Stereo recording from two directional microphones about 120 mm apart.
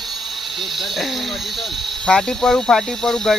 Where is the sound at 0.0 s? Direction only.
Centre (ahead or behind).